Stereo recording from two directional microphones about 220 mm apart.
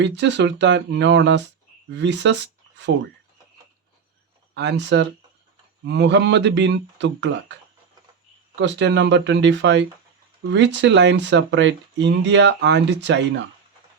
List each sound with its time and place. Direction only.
0.0 s speech: 55° right (ahead or behind)
4.5 s speech: 50° right (ahead or behind)